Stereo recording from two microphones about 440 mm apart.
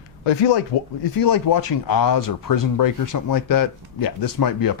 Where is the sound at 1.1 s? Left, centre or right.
Left.